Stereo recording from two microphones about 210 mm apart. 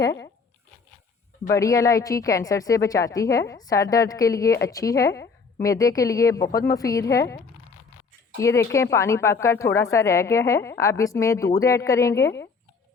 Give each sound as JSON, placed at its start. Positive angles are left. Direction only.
{"t": 1.5, "sound": "a woman's voice", "side_deg": 15}
{"t": 6.5, "sound": "speech", "side_deg": 45}
{"t": 6.7, "sound": "a woman's voice", "side_deg": 15}